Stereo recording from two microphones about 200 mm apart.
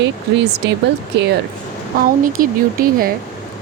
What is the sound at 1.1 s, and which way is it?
Speech, 60° right (ahead or behind).